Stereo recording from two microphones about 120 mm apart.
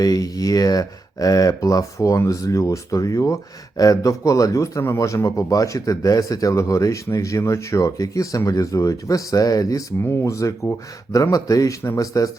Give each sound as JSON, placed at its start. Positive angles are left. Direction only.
{"t": 0.0, "sound": "a man's voice", "side_deg": 30}